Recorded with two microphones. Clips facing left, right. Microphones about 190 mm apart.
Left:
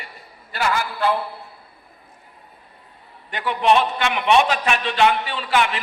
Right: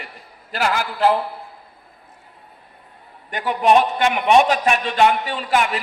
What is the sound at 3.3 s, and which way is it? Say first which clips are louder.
A man's voice: right 2 dB; 45° right (ahead or behind).